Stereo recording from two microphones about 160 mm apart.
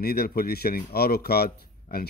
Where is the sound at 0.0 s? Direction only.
75° left (ahead or behind).